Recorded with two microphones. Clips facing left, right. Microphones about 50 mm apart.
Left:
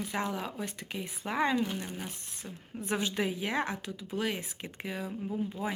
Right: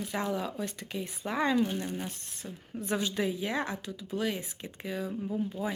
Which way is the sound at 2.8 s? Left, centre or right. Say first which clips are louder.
Right 1 dB; left.